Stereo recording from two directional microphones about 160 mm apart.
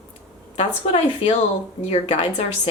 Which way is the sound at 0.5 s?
35° left (ahead or behind).